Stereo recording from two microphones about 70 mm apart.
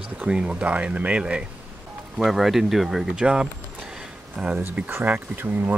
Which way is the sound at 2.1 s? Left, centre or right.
Centre.